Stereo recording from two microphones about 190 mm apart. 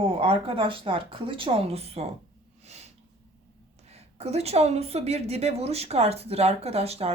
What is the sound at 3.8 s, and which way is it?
A woman's voice, 35° right (ahead or behind).